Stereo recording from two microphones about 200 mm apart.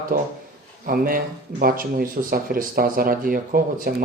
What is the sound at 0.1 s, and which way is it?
Speech, 45° right (ahead or behind).